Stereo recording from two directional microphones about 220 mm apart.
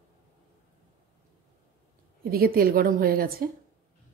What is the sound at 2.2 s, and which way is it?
Speech, 45° right (ahead or behind).